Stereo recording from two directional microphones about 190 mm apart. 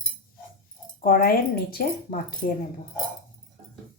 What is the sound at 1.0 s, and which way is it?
A woman's voice, 50° left (ahead or behind).